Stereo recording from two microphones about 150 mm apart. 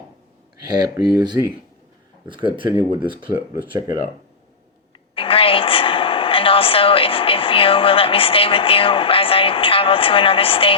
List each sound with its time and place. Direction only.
0.8 s speech: 25° right (ahead or behind)
5.1 s a woman's voice: 35° left (ahead or behind)